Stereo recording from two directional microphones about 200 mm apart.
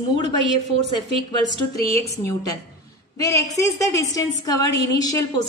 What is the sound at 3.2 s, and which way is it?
A woman's voice, 15° left (ahead or behind).